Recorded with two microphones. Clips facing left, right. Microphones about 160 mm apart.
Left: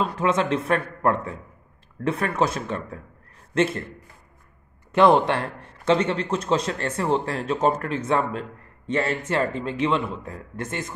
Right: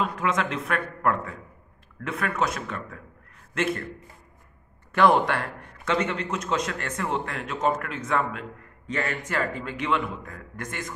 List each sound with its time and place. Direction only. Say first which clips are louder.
0.0 s a man's voice: left 4 dB; 30° left (ahead or behind)
4.9 s a man's voice: left 3 dB; 25° left (ahead or behind)